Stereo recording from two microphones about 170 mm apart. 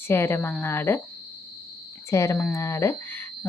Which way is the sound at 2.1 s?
15° left (ahead or behind).